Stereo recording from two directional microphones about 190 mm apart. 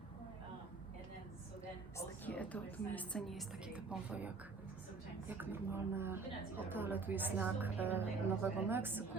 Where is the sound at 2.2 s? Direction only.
5° left (ahead or behind); by 9.0 s 10° right (ahead or behind).